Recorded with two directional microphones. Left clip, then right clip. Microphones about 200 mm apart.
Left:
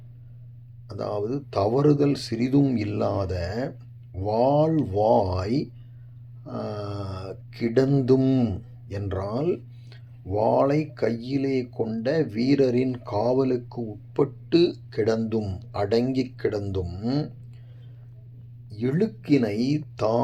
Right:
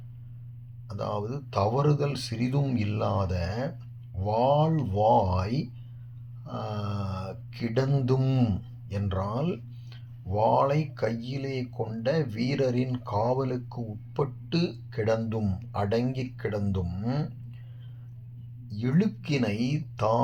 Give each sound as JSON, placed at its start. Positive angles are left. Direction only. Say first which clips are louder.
{"t": 0.9, "sound": "speech", "louder": "left 4 dB", "side_deg": 30}
{"t": 18.7, "sound": "speech", "louder": "left 4 dB", "side_deg": 30}